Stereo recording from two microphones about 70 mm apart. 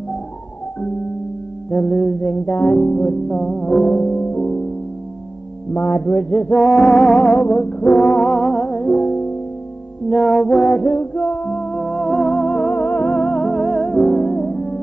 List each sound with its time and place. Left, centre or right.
1.7 s music: centre
5.9 s a sound: left
6.5 s music: centre
11.0 s music: centre
14.2 s music: centre